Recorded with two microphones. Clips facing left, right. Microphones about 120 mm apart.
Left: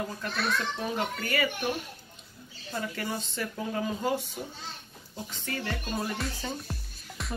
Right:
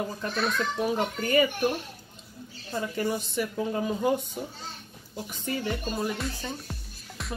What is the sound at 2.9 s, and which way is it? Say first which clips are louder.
Speech: right 5 dB; 15° right (ahead or behind).